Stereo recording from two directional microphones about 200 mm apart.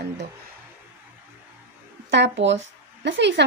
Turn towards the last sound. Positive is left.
turn(degrees=-60)  # may be behind; listen again after turning